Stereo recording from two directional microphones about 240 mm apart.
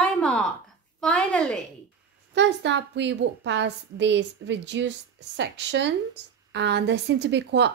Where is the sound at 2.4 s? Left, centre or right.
Right.